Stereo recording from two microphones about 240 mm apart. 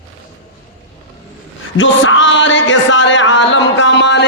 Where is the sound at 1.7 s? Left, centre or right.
Left.